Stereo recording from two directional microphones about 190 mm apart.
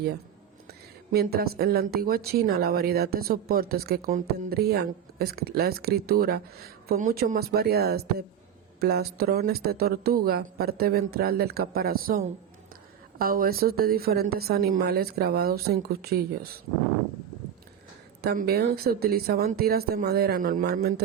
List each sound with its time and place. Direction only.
0.7 s a woman's voice: 55° right (ahead or behind)
18.2 s a woman's voice: 55° right (ahead or behind)